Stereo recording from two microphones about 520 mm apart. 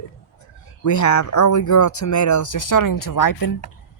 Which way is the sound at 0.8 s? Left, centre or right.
Left.